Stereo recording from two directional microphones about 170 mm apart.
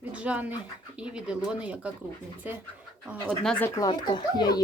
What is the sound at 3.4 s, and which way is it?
Speech, 5° left (ahead or behind).